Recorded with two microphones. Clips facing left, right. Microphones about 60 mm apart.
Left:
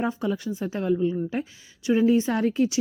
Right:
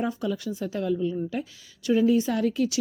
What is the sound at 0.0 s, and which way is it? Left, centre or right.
A woman's voice, left.